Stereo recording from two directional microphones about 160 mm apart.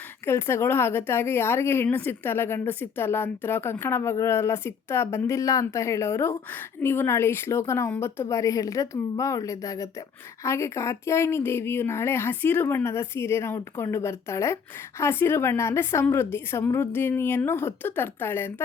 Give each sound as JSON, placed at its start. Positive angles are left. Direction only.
{"t": 0.3, "sound": "a woman's voice", "side_deg": 15}